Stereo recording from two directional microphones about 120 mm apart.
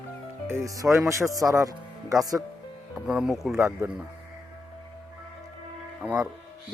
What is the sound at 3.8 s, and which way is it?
Speech, 20° right (ahead or behind).